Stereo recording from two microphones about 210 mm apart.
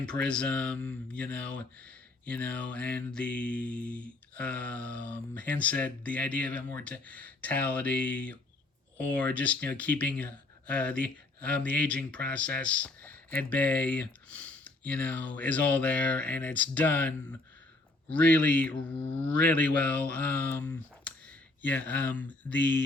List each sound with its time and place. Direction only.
0.0 s speech: 5° left (ahead or behind)
19.1 s speech: 65° right (ahead or behind)
19.4 s speech: 5° left (ahead or behind)